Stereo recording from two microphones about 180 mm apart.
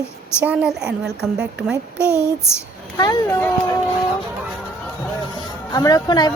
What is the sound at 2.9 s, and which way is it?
Speech, 20° left (ahead or behind).